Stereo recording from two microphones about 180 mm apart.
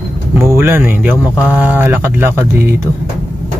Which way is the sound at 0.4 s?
15° right (ahead or behind).